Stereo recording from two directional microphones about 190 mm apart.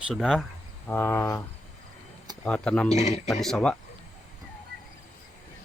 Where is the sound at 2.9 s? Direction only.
35° left (ahead or behind).